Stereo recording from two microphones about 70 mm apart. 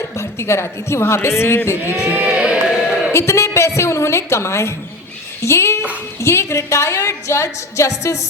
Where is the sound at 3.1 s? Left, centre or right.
Left.